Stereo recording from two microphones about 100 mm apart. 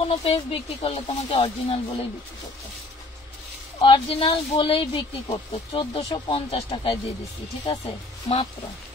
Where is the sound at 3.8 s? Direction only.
65° left (ahead or behind).